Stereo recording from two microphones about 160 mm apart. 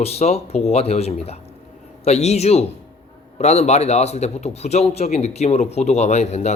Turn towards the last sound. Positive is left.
turn(degrees=45)  # may be behind; listen again after turning